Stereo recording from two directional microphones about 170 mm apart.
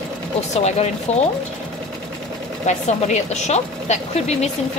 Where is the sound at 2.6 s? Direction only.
40° left (ahead or behind).